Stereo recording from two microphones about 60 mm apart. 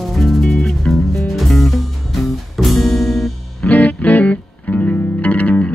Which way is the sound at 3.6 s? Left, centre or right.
Left.